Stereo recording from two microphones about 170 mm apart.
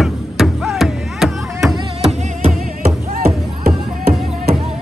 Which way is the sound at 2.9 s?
60° right (ahead or behind).